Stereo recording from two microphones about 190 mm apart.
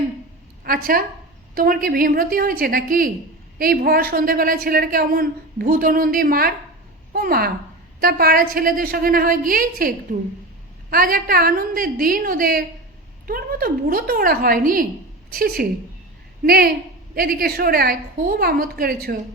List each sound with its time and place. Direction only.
0.6 s a woman's voice: 50° right (ahead or behind)